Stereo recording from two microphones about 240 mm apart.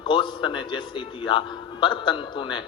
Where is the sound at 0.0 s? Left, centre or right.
Centre.